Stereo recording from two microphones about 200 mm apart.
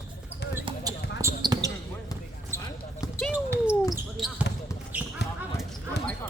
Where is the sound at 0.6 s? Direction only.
20° right (ahead or behind).